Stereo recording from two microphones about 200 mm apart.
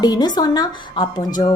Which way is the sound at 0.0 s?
20° left (ahead or behind).